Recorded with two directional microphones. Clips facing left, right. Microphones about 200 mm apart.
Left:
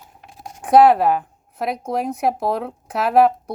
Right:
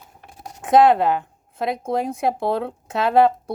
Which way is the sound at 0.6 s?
25° right (ahead or behind).